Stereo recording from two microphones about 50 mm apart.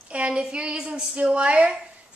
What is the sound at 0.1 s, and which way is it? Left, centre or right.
A woman's voice, right.